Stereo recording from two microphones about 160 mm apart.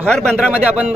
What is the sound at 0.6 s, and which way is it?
Speech, 10° right (ahead or behind).